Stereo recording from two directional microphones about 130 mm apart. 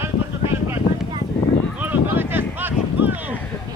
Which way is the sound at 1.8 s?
15° right (ahead or behind).